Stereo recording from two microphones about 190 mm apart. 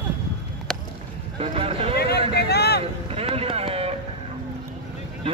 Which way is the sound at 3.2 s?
30° right (ahead or behind).